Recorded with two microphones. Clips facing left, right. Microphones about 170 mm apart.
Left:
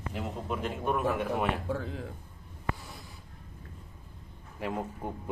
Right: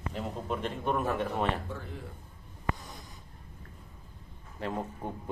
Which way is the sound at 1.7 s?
90° left.